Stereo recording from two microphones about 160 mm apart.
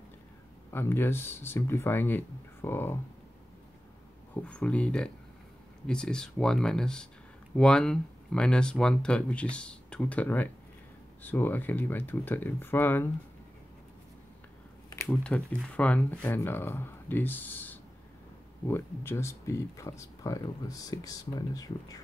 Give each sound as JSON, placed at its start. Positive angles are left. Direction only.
{"t": 0.7, "sound": "speech", "side_deg": 15}
{"t": 4.4, "sound": "speech", "side_deg": 5}
{"t": 15.0, "sound": "speech", "side_deg": 5}